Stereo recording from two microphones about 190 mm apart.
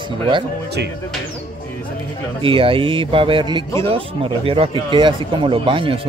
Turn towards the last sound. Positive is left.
turn(degrees=-30)  # may be behind; listen again after turning